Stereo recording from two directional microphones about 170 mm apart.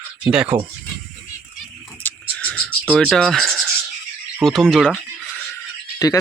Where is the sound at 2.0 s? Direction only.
10° left (ahead or behind).